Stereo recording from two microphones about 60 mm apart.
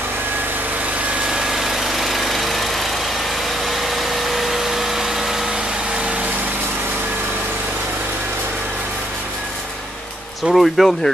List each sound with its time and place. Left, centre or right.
1.3 s vehicle: centre
10.4 s speech: centre